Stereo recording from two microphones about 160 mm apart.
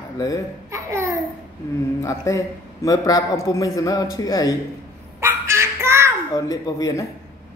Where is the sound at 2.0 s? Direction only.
20° left (ahead or behind).